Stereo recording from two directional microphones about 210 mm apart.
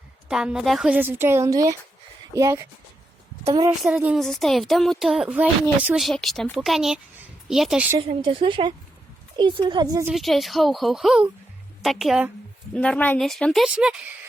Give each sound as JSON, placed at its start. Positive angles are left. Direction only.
{"t": 0.3, "sound": "a woman's voice", "side_deg": -5}
{"t": 3.8, "sound": "a woman's voice", "side_deg": -5}
{"t": 8.0, "sound": "a woman's voice", "side_deg": -25}
{"t": 10.1, "sound": "a woman's voice", "side_deg": 0}